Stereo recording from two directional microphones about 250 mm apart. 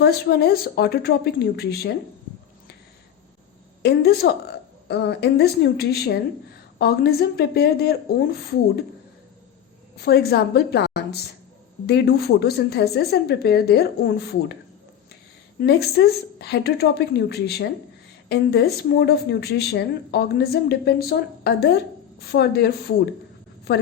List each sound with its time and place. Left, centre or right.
0.0 s a woman's voice: left
3.8 s a woman's voice: left
10.0 s a woman's voice: left
15.6 s a woman's voice: left